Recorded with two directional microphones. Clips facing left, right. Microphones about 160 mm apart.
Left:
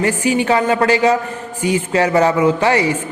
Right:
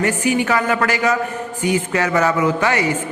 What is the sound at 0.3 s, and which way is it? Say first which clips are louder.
A man's voice: left 3 dB; 25° left (ahead or behind).